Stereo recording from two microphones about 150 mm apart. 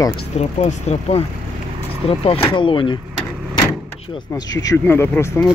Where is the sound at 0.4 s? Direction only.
45° left (ahead or behind).